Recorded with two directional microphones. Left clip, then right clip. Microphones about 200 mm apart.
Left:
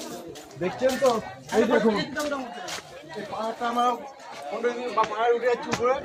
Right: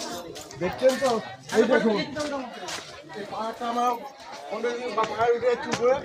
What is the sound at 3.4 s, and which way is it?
A man's voice, centre (ahead or behind).